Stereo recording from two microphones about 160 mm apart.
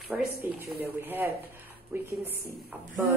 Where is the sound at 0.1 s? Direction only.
5° right (ahead or behind).